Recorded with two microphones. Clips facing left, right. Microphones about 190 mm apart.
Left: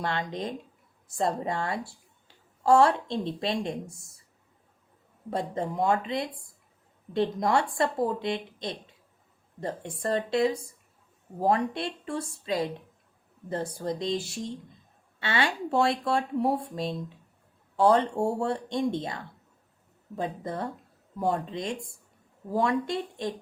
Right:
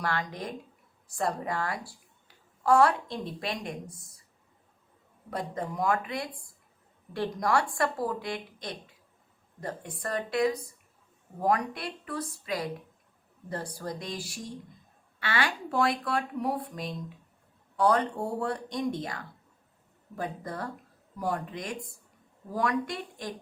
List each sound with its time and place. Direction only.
0.0 s a woman's voice: 25° left (ahead or behind)
5.3 s speech: 25° left (ahead or behind)